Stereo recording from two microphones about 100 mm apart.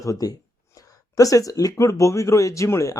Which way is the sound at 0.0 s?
35° left (ahead or behind).